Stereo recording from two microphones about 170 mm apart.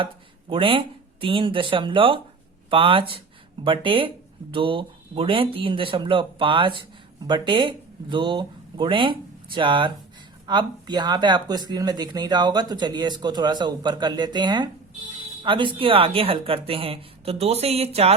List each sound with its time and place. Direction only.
0.5 s speech: 30° right (ahead or behind)